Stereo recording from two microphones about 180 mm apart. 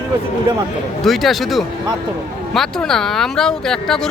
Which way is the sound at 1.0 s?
Centre (ahead or behind).